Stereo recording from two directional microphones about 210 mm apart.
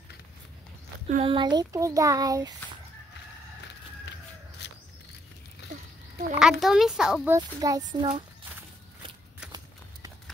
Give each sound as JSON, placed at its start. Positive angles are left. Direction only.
{"t": 1.0, "sound": "speech", "side_deg": -30}
{"t": 4.6, "sound": "a sound", "side_deg": 55}
{"t": 6.3, "sound": "a child's voice", "side_deg": -5}
{"t": 7.3, "sound": "speech", "side_deg": -15}